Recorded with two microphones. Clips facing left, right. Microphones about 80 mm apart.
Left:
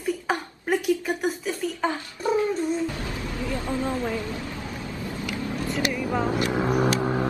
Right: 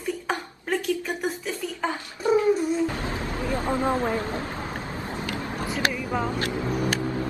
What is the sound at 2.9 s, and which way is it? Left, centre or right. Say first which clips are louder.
Vehicle: right 2 dB; right.